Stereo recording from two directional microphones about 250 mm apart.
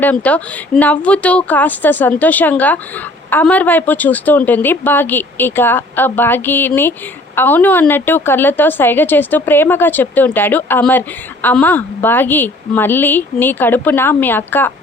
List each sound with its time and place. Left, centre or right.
0.0 s speech: centre